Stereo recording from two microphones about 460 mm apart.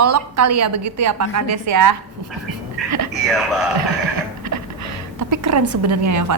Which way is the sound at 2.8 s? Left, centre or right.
Centre.